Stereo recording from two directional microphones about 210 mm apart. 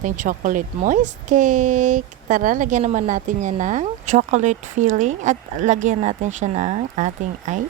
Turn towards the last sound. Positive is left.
turn(degrees=-35)  # may be behind; listen again after turning